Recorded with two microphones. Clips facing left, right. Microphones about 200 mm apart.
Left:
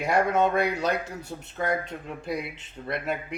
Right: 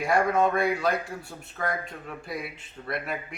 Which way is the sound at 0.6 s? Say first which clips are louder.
Even; 20° left (ahead or behind).